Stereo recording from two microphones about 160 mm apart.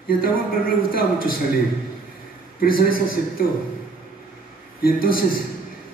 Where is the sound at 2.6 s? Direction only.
65° left (ahead or behind).